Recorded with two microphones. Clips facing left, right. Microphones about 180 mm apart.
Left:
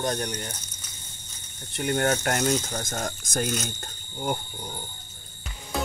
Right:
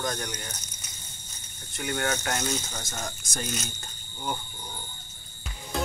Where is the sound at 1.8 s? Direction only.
45° left (ahead or behind).